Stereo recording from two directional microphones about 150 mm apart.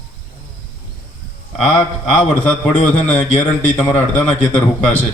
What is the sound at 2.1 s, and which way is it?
A man's voice, 10° left (ahead or behind).